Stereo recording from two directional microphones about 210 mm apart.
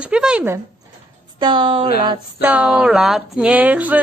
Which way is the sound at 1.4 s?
20° right (ahead or behind).